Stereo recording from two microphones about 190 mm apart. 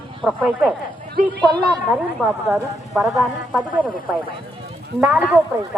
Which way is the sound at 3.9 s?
25° right (ahead or behind).